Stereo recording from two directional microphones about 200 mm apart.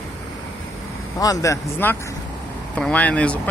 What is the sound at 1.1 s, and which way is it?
Speech, 15° left (ahead or behind).